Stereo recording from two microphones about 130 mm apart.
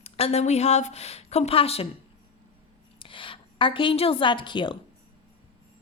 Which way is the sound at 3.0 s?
40° left (ahead or behind).